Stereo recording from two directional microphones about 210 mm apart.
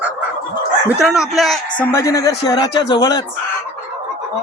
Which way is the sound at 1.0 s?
5° right (ahead or behind).